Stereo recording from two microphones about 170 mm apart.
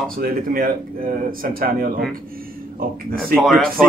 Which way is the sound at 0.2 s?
55° right (ahead or behind).